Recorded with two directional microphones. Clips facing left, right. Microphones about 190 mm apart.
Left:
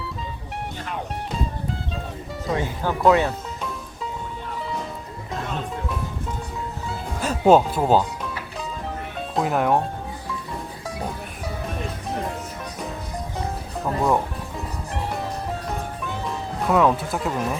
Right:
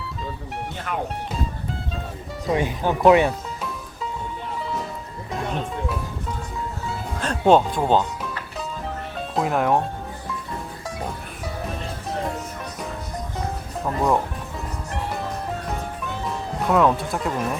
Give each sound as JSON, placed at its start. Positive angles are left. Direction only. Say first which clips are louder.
{"t": 0.9, "sound": "speech", "louder": "right 5 dB", "side_deg": -60}
{"t": 2.5, "sound": "speech", "louder": "right 3 dB", "side_deg": -20}
{"t": 6.8, "sound": "music", "louder": "left 1 dB", "side_deg": 5}
{"t": 9.1, "sound": "speech", "louder": "even", "side_deg": 0}
{"t": 13.8, "sound": "speech", "louder": "even", "side_deg": 0}
{"t": 16.0, "sound": "music", "louder": "right 1 dB", "side_deg": 0}